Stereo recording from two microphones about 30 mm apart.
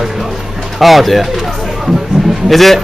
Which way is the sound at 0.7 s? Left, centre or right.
Centre.